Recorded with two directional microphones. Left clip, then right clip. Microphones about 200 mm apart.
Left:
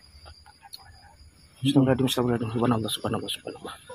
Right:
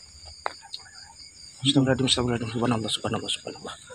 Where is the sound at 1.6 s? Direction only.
10° left (ahead or behind).